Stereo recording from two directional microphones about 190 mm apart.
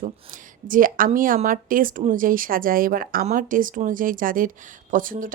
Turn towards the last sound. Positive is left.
turn(degrees=-45)  # may be behind; listen again after turning